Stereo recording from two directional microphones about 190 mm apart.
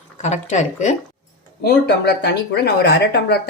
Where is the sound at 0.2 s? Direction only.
40° left (ahead or behind).